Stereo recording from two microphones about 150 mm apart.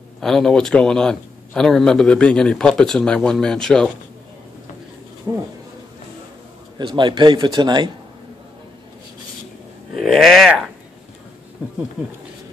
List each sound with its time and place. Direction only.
0.2 s a man's voice: 5° left (ahead or behind)
5.3 s speech: 20° right (ahead or behind)
6.8 s a man's voice: 35° right (ahead or behind)
9.9 s a man's voice: centre (ahead or behind)